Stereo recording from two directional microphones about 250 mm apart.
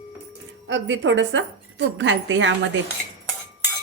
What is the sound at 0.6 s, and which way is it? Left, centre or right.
A woman's voice, right.